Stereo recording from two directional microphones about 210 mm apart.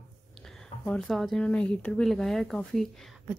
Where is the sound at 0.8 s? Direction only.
5° left (ahead or behind).